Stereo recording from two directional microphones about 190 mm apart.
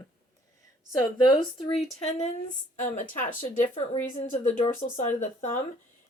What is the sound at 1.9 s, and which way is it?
Speech, 35° left (ahead or behind).